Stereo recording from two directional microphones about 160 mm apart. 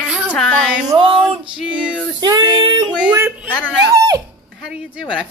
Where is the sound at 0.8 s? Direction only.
30° right (ahead or behind).